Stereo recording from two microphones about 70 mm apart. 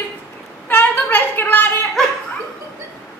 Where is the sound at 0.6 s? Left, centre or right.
Left.